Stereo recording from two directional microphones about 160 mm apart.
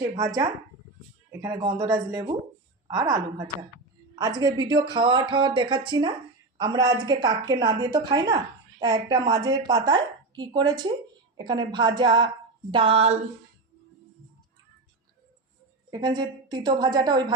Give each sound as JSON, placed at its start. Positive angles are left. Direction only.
{"t": 0.2, "sound": "a woman's voice", "side_deg": -25}
{"t": 15.9, "sound": "a woman's voice", "side_deg": -25}